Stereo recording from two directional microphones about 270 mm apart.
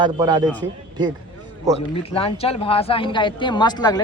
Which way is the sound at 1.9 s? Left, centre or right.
Left.